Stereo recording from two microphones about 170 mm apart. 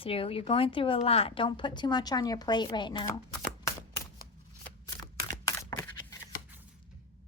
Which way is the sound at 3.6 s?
20° left (ahead or behind).